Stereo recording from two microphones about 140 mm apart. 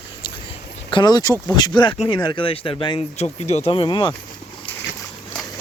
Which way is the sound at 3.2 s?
50° left (ahead or behind).